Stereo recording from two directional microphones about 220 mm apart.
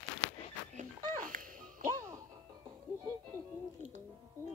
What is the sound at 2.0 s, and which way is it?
Music, 15° right (ahead or behind).